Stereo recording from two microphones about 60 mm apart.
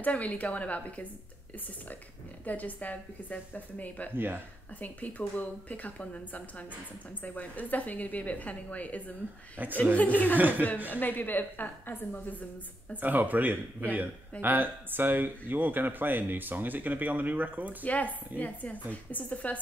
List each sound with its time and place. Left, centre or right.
0.0 s a woman's voice: left
2.4 s a woman's voice: left
4.1 s speech: right
4.7 s a woman's voice: left
9.6 s speech: right
9.9 s a woman's voice: left
10.3 s speech: right
10.9 s a woman's voice: left
13.0 s speech: right
17.8 s a woman's voice: left